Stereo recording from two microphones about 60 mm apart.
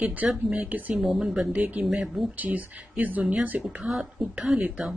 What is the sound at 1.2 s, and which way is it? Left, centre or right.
A woman's voice, centre.